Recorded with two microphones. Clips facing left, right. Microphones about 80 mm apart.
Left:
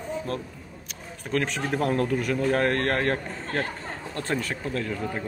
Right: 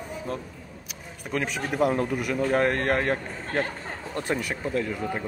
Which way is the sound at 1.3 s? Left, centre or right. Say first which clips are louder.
Even; centre.